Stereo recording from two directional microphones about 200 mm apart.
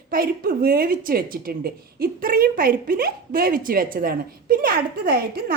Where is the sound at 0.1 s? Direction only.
50° right (ahead or behind).